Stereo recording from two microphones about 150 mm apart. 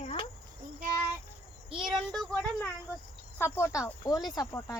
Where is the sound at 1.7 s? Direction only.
Centre (ahead or behind).